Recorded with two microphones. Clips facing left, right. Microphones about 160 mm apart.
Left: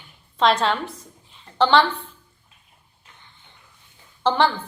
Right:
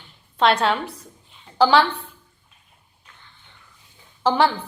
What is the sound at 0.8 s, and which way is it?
Speech, 30° right (ahead or behind).